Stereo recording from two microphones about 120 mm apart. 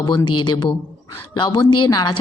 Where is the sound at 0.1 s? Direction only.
35° left (ahead or behind).